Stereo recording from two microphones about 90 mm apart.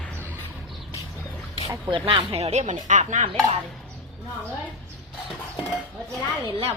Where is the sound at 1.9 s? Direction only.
80° right.